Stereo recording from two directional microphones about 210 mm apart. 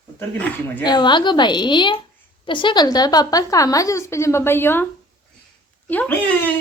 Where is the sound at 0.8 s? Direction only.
20° left (ahead or behind).